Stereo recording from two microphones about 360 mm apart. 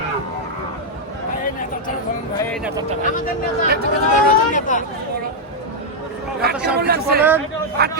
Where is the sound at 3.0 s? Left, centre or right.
Left.